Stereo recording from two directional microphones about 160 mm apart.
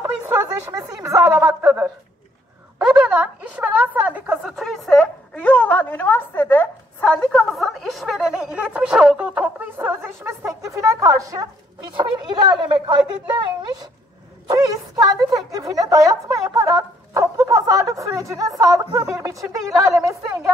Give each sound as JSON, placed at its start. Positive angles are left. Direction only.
{"t": 0.0, "sound": "a sound", "side_deg": -15}
{"t": 1.0, "sound": "a woman's voice", "side_deg": -15}
{"t": 14.5, "sound": "a woman's voice", "side_deg": -20}